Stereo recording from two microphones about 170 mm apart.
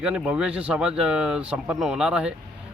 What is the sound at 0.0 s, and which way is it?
A man's voice, 5° right (ahead or behind).